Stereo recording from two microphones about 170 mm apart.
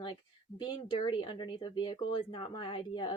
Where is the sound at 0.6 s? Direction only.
25° left (ahead or behind).